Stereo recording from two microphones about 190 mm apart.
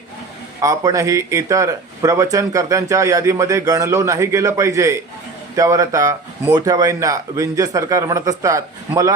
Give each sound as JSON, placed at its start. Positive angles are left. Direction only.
{"t": 0.6, "sound": "speech", "side_deg": -15}